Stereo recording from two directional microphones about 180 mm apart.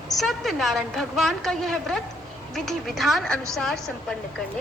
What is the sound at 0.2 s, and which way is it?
A woman's voice, centre (ahead or behind).